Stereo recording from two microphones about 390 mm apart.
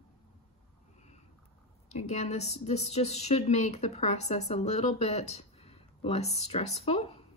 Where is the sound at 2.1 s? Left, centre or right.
Centre.